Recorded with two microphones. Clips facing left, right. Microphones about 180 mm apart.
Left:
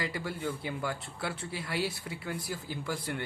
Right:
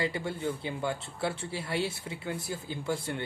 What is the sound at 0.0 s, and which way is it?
Speech, 25° right (ahead or behind).